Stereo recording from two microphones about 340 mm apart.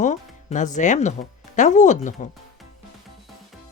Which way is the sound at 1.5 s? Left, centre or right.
Left.